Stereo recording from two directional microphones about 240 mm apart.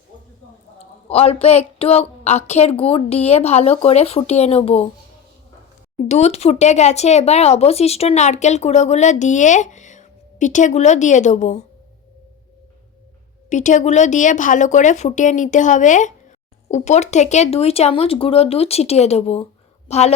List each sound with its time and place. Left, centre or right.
1.1 s speech: left
6.1 s speech: left
13.5 s speech: left